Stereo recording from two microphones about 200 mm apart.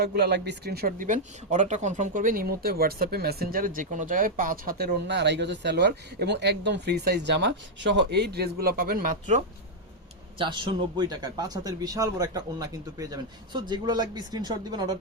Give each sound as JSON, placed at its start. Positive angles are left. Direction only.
{"t": 0.0, "sound": "speech", "side_deg": -55}
{"t": 10.3, "sound": "speech", "side_deg": -25}